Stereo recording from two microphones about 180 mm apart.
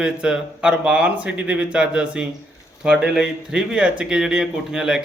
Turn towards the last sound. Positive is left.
turn(degrees=-5)  # may be behind; listen again after turning